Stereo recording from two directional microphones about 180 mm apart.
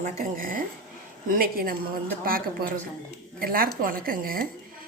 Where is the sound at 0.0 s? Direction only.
50° right (ahead or behind).